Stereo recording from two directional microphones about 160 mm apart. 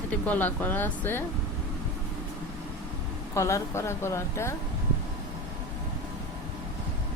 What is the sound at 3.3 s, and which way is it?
A woman's voice, 20° left (ahead or behind).